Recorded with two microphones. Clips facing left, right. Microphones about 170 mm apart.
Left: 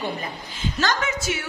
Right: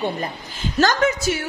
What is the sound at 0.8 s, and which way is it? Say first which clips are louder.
Speech: right 7 dB; 40° right (ahead or behind).